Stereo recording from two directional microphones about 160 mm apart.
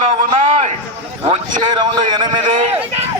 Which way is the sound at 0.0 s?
45° right (ahead or behind).